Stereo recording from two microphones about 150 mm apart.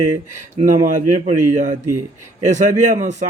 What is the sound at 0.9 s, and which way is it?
Speech, 55° right (ahead or behind).